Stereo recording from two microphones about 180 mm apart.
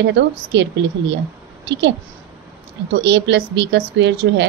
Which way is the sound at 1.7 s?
75° right (ahead or behind).